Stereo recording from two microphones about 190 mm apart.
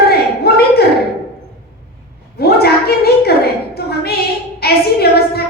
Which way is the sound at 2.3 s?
55° left (ahead or behind).